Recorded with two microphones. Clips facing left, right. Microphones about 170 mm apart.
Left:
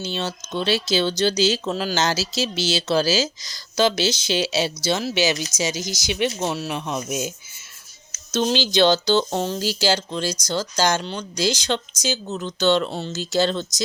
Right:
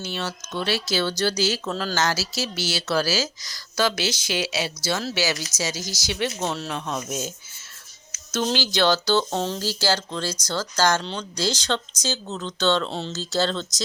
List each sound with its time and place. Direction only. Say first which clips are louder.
0.0 s speech: left 3 dB; 25° left (ahead or behind)
9.3 s speech: left 2 dB; 5° left (ahead or behind)
9.6 s speech: left 3 dB; 15° left (ahead or behind)